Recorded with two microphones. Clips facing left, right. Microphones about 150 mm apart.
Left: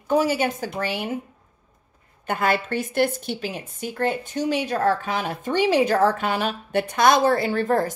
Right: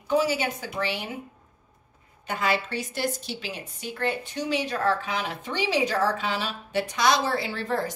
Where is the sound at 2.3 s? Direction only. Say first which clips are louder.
Left 4 dB; 50° left (ahead or behind).